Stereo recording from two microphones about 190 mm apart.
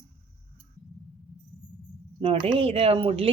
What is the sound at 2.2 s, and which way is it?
Speech, 25° right (ahead or behind).